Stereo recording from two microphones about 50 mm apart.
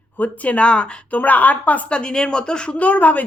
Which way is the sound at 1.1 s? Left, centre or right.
Left.